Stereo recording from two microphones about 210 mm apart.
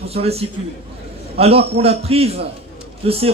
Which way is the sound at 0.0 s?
30° right (ahead or behind).